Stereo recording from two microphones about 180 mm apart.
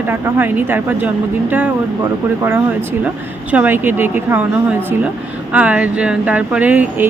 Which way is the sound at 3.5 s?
10° right (ahead or behind).